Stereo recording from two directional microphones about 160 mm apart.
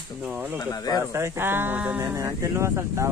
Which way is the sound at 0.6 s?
25° left (ahead or behind).